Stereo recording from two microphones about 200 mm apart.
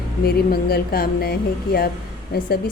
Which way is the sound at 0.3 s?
50° left (ahead or behind).